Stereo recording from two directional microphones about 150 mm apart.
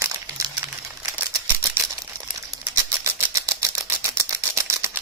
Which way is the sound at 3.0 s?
20° right (ahead or behind).